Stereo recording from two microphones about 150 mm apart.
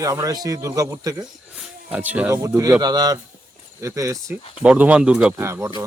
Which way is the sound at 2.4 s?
20° right (ahead or behind).